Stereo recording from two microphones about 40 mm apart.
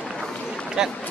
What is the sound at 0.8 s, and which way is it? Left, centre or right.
Speech, centre.